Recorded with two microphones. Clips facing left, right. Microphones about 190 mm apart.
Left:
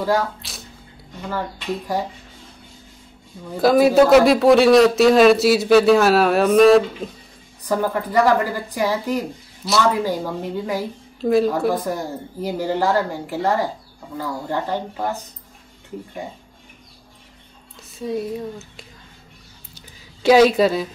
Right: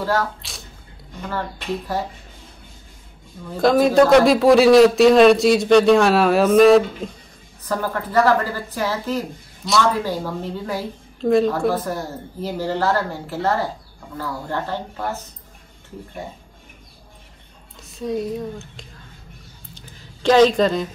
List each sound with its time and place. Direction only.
0.4 s squish: centre (ahead or behind)
3.5 s a man's voice: 5° left (ahead or behind)
7.6 s speech: 15° left (ahead or behind)
9.6 s a man's voice: 5° left (ahead or behind)
10.0 s a woman's voice: 15° left (ahead or behind)
17.9 s a man's voice: centre (ahead or behind)
19.7 s a sound: 10° left (ahead or behind)